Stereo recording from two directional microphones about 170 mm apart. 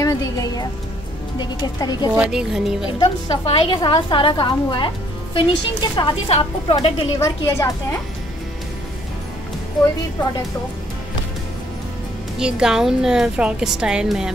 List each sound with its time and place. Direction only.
0.0 s a woman's voice: 20° left (ahead or behind)
2.1 s a woman's voice: 5° right (ahead or behind)
3.0 s a woman's voice: 30° left (ahead or behind)
7.2 s a woman's voice: 20° left (ahead or behind)
12.4 s a woman's voice: 5° right (ahead or behind)